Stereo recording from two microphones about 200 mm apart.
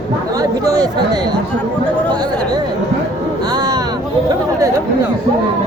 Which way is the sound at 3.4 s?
20° right (ahead or behind).